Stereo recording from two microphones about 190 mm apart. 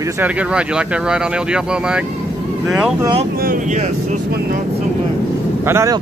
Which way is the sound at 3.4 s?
45° right (ahead or behind).